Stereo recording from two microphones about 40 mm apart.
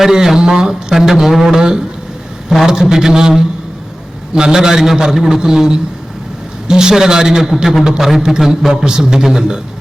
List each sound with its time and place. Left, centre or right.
0.0 s a man's voice: centre